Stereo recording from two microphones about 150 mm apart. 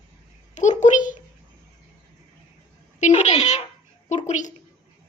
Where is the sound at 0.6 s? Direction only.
55° left (ahead or behind).